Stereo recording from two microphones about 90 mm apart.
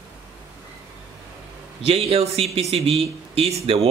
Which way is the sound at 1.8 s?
90° right.